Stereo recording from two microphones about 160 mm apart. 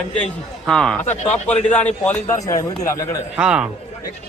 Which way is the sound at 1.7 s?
10° left (ahead or behind).